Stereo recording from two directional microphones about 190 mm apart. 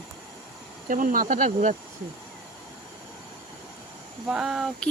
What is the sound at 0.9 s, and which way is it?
Speech, 45° right (ahead or behind).